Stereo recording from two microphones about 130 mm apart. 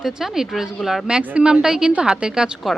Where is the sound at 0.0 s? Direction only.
5° right (ahead or behind).